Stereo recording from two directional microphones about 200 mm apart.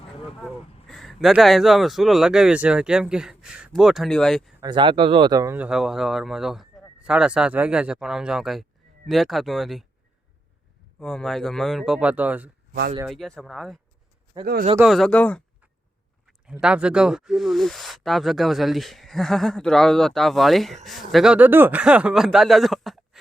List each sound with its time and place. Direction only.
0.9 s speech: centre (ahead or behind)
4.6 s speech: 25° right (ahead or behind)
5.5 s speech: 5° right (ahead or behind)
11.0 s speech: 5° left (ahead or behind)
14.3 s speech: 20° right (ahead or behind)
14.8 s speech: centre (ahead or behind)
16.2 s speech: 5° right (ahead or behind)